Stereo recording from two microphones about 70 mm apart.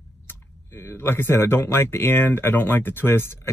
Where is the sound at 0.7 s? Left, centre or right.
Left.